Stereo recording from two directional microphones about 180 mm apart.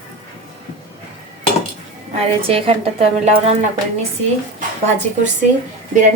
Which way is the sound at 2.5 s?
30° right (ahead or behind).